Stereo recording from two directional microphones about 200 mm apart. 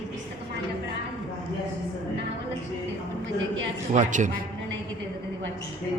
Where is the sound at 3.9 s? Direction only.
40° right (ahead or behind).